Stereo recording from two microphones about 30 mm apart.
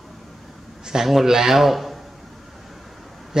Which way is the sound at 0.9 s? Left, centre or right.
Centre.